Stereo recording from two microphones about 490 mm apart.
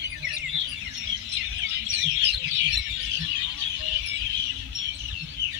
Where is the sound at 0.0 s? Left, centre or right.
Right.